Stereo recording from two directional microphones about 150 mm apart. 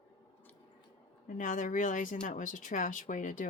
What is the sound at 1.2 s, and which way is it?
Speech, 60° left (ahead or behind).